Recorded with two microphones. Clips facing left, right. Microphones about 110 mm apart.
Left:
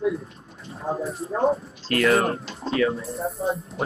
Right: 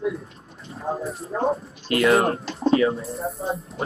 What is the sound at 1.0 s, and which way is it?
Speech, centre (ahead or behind).